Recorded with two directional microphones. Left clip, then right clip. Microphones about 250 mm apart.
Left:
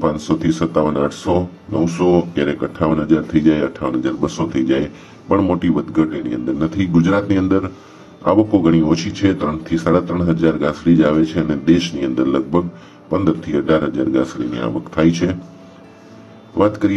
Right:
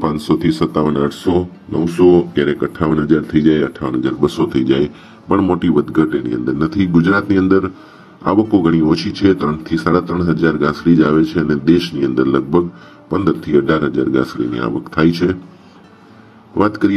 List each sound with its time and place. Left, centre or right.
0.0 s speech: right
2.1 s speech: right
16.5 s speech: right